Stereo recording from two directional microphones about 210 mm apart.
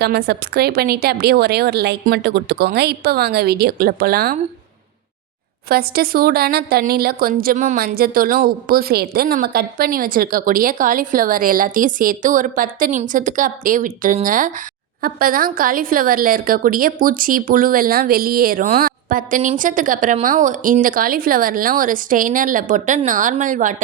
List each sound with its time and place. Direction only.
0.0 s a woman's voice: 50° right (ahead or behind)
5.6 s a woman's voice: 45° right (ahead or behind)